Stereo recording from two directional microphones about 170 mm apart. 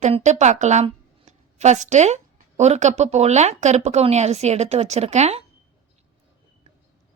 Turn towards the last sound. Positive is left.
turn(degrees=-40)  # may be behind; listen again after turning